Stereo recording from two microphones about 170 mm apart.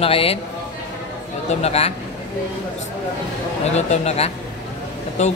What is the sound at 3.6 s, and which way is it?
Speech, 40° left (ahead or behind).